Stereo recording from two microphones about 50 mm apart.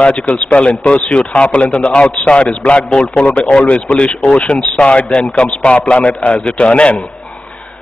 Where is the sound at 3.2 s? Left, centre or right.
Left.